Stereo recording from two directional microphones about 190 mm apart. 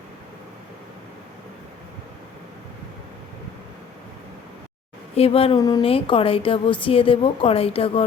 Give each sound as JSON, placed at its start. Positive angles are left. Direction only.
{"t": 5.1, "sound": "speech", "side_deg": 30}